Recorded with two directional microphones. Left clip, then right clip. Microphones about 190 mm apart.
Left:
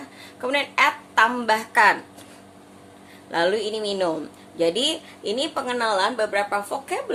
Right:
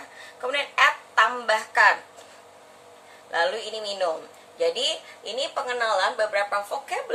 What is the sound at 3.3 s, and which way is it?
A woman's voice, 40° left (ahead or behind).